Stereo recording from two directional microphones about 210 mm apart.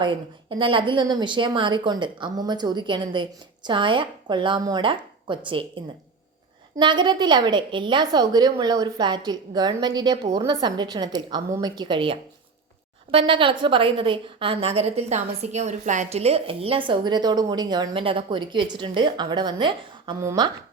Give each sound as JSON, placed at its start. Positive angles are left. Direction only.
{"t": 0.6, "sound": "a woman's voice", "side_deg": -25}